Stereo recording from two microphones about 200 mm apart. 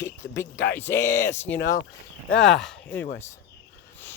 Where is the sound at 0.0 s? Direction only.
15° left (ahead or behind).